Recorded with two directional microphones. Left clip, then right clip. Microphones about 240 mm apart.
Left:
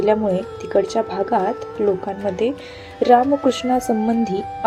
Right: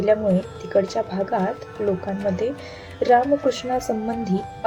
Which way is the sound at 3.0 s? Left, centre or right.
Centre.